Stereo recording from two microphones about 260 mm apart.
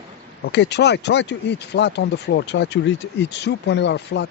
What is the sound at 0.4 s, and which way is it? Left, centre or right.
A man's voice, left.